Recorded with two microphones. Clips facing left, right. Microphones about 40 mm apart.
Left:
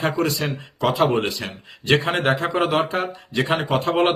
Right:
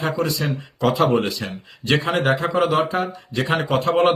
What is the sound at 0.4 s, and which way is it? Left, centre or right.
Speech, left.